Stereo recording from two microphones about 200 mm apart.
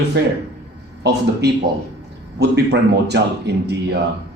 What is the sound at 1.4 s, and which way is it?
Speech, 55° right (ahead or behind).